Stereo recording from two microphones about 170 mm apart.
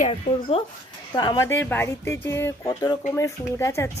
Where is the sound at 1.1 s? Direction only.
20° left (ahead or behind).